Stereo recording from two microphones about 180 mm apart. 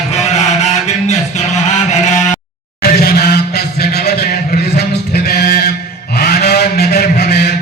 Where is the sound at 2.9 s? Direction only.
60° left (ahead or behind).